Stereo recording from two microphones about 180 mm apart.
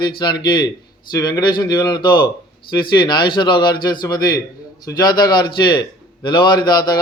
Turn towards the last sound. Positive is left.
turn(degrees=25)  # may be behind; listen again after turning